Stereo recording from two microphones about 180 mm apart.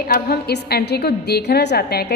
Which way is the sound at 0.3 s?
60° left (ahead or behind).